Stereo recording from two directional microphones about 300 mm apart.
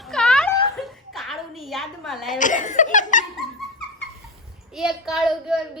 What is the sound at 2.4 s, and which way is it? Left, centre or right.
Speech, left.